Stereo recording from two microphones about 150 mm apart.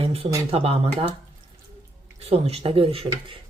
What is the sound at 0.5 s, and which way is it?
Speech, 40° right (ahead or behind).